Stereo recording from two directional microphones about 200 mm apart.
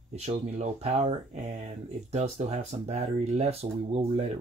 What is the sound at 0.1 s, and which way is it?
Speech, 35° right (ahead or behind).